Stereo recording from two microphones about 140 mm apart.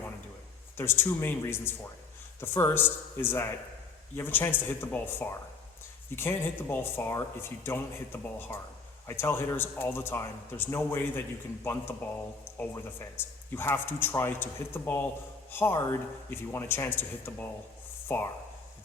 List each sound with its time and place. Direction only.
0.8 s speech: 15° left (ahead or behind)